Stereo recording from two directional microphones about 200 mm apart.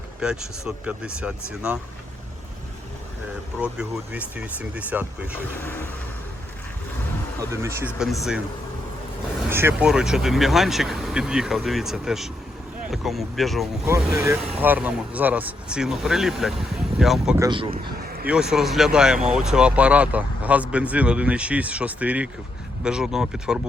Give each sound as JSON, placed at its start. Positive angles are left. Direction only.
{"t": 0.2, "sound": "speech", "side_deg": -5}
{"t": 3.6, "sound": "speech", "side_deg": -5}
{"t": 5.6, "sound": "vehicle", "side_deg": 10}
{"t": 7.5, "sound": "speech", "side_deg": -15}
{"t": 7.9, "sound": "speech", "side_deg": 0}
{"t": 9.5, "sound": "speech", "side_deg": -10}
{"t": 17.3, "sound": "speech", "side_deg": -20}
{"t": 17.8, "sound": "a sound", "side_deg": -50}
{"t": 18.3, "sound": "speech", "side_deg": -5}